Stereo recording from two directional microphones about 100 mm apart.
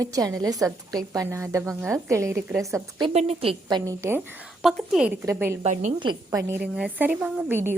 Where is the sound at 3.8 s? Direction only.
30° right (ahead or behind).